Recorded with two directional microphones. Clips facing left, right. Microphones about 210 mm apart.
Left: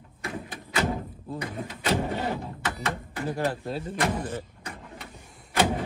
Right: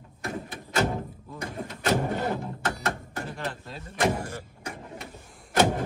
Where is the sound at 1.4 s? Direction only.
45° right (ahead or behind).